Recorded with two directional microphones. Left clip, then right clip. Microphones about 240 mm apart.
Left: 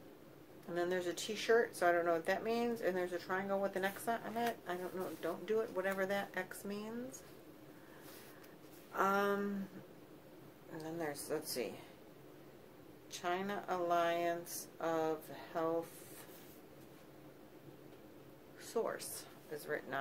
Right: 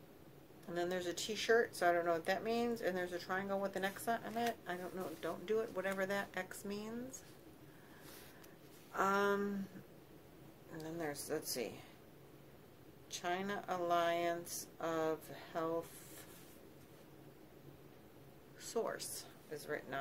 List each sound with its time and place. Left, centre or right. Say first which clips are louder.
0.7 s speech: left 2 dB; centre
8.9 s speech: even; centre
10.8 s speech: left 1 dB; centre
13.1 s speech: left 1 dB; centre
18.6 s speech: left 1 dB; centre